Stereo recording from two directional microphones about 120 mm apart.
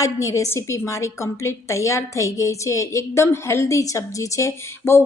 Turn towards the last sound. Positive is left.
turn(degrees=25)  # may be behind; listen again after turning